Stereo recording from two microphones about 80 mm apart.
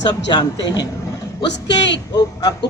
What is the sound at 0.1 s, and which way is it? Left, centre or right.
Speech, left.